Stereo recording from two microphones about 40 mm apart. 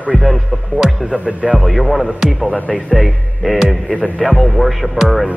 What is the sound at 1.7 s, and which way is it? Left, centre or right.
Speech, centre.